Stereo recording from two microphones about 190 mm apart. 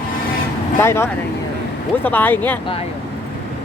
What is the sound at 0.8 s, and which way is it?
Speech, 15° left (ahead or behind).